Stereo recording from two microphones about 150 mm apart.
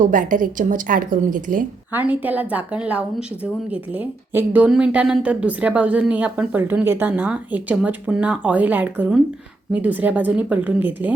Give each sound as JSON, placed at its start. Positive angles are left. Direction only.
{"t": 0.0, "sound": "a woman's voice", "side_deg": -60}
{"t": 1.9, "sound": "speech", "side_deg": -10}